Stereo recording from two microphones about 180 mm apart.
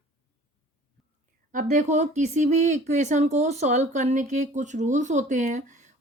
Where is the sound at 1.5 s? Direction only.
45° right (ahead or behind).